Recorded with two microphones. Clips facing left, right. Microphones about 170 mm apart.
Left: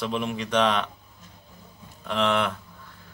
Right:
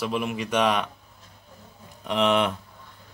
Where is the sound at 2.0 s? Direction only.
15° right (ahead or behind).